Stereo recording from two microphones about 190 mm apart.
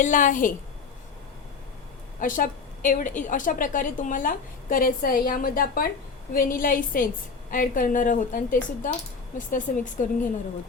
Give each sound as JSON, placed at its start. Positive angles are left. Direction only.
{"t": 0.0, "sound": "a woman's voice", "side_deg": 40}
{"t": 2.2, "sound": "a woman's voice", "side_deg": 45}